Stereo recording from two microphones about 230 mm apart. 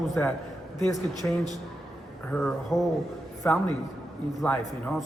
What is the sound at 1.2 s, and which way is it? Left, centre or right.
A man's voice, centre.